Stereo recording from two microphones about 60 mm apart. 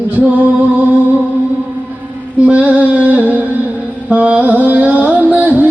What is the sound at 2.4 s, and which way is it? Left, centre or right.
Music, right.